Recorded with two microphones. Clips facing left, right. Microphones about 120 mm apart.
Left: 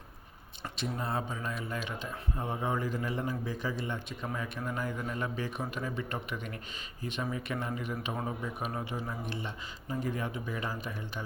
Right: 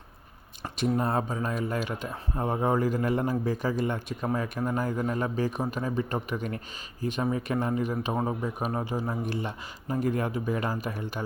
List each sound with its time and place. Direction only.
0.6 s speech: 45° right (ahead or behind)
9.3 s speech: 50° right (ahead or behind)